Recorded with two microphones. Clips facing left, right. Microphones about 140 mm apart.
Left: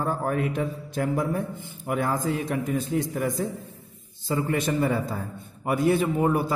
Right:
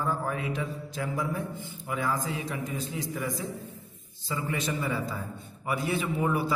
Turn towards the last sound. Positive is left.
turn(degrees=50)  # may be behind; listen again after turning